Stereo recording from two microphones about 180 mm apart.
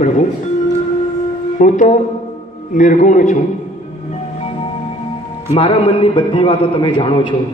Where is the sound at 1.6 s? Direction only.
45° left (ahead or behind).